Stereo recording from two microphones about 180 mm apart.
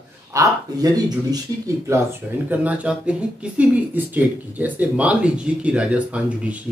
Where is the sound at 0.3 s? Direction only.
15° right (ahead or behind).